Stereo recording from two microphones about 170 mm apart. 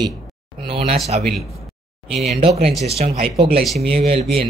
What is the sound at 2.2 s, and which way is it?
Speech, 40° right (ahead or behind).